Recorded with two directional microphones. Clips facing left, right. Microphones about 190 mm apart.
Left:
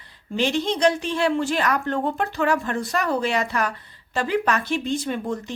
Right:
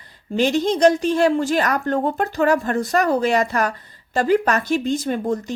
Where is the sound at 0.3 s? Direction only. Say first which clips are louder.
Right 4 dB; 45° right (ahead or behind).